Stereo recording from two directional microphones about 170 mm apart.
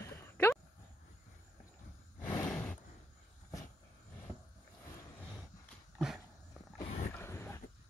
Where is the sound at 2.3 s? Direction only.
5° left (ahead or behind).